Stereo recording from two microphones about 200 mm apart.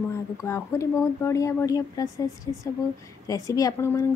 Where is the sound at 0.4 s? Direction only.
15° left (ahead or behind).